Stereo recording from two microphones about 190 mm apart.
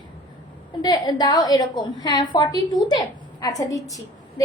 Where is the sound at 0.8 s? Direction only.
20° left (ahead or behind).